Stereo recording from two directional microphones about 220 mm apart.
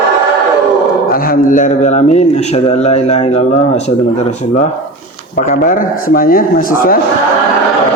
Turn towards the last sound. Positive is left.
turn(degrees=40)  # may be behind; listen again after turning